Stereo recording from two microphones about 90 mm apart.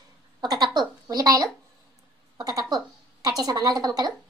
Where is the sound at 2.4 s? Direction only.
45° right (ahead or behind).